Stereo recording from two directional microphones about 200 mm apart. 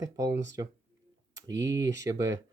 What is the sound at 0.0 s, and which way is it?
Speech, 15° right (ahead or behind).